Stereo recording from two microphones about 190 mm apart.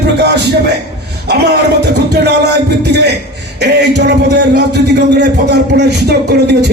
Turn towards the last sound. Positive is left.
turn(degrees=-60)  # may be behind; listen again after turning